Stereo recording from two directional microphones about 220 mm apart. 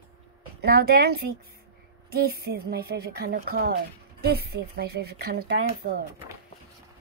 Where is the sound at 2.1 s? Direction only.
45° right (ahead or behind).